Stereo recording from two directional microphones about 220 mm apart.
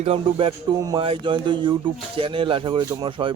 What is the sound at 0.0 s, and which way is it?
Speech, 25° right (ahead or behind).